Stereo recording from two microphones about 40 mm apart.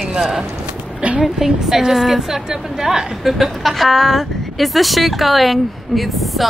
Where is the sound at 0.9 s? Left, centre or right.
Right.